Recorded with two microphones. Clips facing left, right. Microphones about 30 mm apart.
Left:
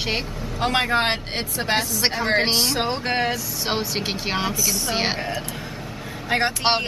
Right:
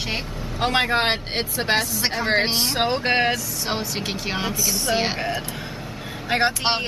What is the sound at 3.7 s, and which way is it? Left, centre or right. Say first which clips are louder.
A woman's voice: left 2 dB; centre.